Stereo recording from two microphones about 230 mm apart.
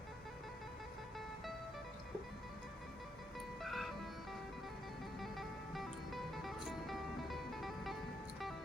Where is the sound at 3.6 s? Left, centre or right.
Centre.